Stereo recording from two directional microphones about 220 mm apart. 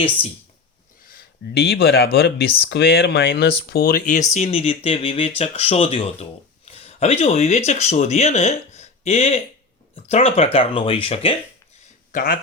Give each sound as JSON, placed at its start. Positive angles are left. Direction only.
{"t": 1.0, "sound": "speech", "side_deg": 45}
{"t": 12.1, "sound": "speech", "side_deg": 40}